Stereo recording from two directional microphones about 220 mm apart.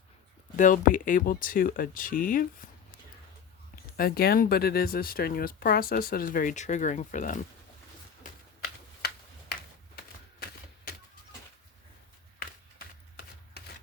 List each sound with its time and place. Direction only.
0.5 s speech: 35° left (ahead or behind)
3.9 s speech: 45° left (ahead or behind)
9.0 s a sound: 45° left (ahead or behind)